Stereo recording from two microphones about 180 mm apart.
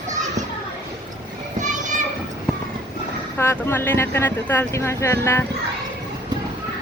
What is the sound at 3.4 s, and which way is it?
Speech, 10° left (ahead or behind).